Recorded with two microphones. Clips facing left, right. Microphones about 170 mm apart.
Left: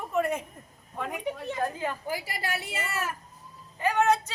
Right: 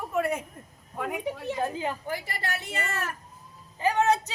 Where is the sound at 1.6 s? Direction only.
20° right (ahead or behind).